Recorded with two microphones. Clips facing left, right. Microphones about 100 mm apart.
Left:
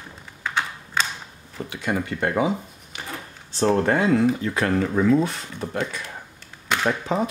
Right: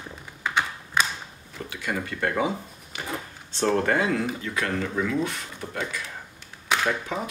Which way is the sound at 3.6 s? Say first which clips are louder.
Left 3 dB; 25° left (ahead or behind).